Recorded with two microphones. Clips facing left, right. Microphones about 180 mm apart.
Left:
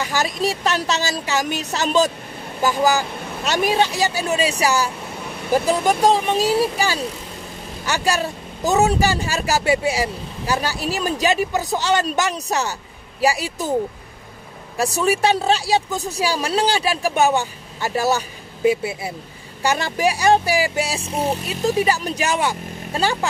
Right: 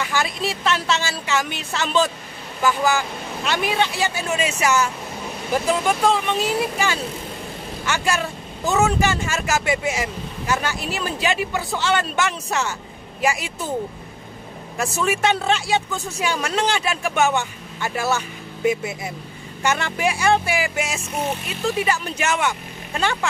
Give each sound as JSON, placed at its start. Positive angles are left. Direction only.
{"t": 0.0, "sound": "speech", "side_deg": 40}
{"t": 14.8, "sound": "speech", "side_deg": 35}